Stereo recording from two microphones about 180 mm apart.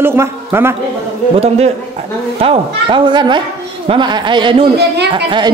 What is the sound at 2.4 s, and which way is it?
A man's voice, 30° right (ahead or behind).